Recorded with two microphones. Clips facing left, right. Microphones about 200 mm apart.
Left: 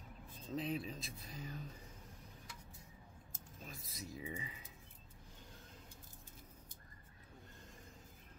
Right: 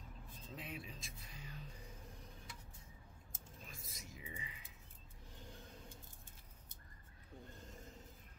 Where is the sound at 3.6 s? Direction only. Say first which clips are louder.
Left 7 dB; 35° left (ahead or behind).